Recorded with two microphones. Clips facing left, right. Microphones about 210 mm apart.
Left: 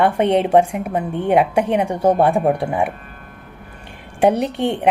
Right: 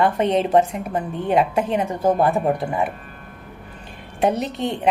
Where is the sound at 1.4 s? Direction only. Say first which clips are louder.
Left 2 dB; 70° left (ahead or behind).